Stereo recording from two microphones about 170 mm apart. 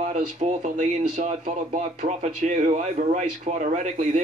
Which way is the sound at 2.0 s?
45° right (ahead or behind).